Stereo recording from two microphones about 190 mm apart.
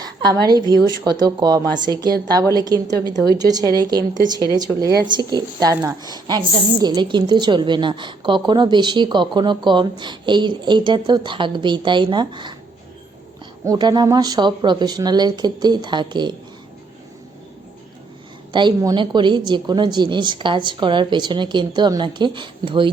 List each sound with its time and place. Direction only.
0.0 s a woman's voice: 20° right (ahead or behind)
13.7 s a woman's voice: 20° right (ahead or behind)
18.5 s a woman's voice: 20° right (ahead or behind)